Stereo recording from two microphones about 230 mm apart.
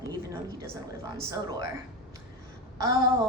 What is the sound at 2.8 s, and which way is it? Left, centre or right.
Speech, centre.